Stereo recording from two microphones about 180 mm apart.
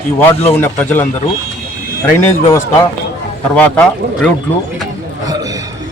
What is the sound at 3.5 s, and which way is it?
Speech, 5° left (ahead or behind).